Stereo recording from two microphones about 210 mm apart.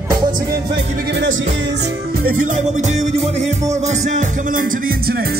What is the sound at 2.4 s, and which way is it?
Music, 35° right (ahead or behind).